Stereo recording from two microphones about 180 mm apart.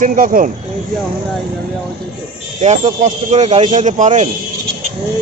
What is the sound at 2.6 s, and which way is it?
A man's voice, 45° right (ahead or behind).